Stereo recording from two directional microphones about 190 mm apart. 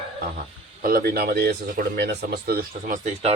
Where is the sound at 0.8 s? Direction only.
50° right (ahead or behind).